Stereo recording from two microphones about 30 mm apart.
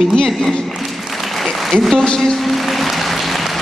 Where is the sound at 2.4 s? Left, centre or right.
Centre.